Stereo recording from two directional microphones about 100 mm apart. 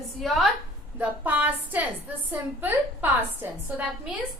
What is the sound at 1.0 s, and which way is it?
A woman's voice, 15° right (ahead or behind).